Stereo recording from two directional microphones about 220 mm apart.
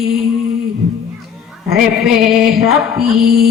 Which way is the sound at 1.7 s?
Centre (ahead or behind).